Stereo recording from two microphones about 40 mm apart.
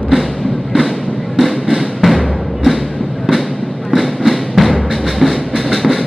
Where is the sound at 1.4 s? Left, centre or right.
Centre.